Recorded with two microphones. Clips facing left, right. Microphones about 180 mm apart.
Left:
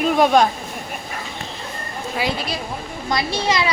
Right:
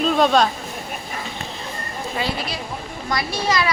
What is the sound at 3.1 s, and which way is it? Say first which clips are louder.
Speech: left 2 dB; 25° left (ahead or behind).